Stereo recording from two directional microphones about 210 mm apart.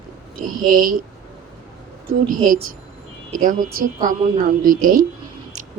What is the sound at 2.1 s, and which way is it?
Speech, 40° right (ahead or behind).